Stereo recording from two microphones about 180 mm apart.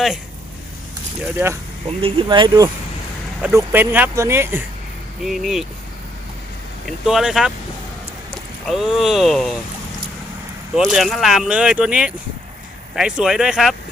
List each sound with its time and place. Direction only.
2.0 s speech: 30° right (ahead or behind)
3.4 s speech: 10° right (ahead or behind)
5.2 s speech: centre (ahead or behind)
6.8 s speech: centre (ahead or behind)
10.8 s speech: centre (ahead or behind)